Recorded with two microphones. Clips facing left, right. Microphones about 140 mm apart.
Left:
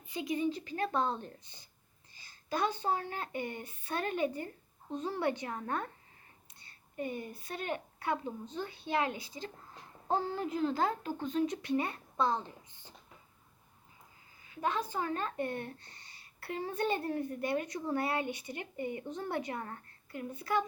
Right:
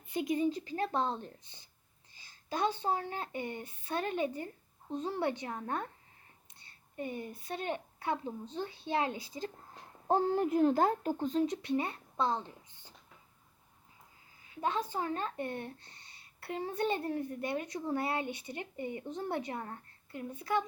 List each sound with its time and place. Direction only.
0.1 s a woman's voice: 50° right (ahead or behind)
10.1 s speech: 50° right (ahead or behind)
11.2 s a woman's voice: 35° right (ahead or behind)
14.6 s a woman's voice: 25° right (ahead or behind)
17.0 s a woman's voice: 10° right (ahead or behind)
17.4 s a woman's voice: 25° right (ahead or behind)